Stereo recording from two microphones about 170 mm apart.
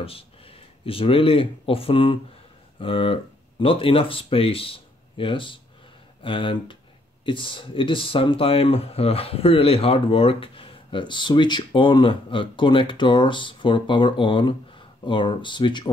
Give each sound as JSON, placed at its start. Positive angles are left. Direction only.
{"t": 0.0, "sound": "speech", "side_deg": 35}